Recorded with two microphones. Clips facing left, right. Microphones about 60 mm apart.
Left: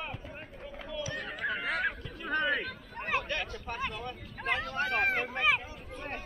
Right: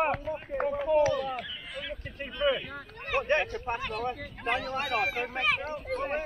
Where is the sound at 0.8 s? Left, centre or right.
Right.